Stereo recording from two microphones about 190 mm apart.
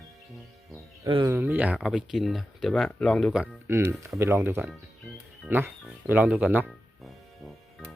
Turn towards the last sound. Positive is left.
turn(degrees=0)  # may be behind; listen again after turning